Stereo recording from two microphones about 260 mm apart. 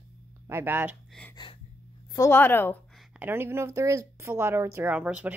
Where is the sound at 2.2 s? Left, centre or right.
Centre.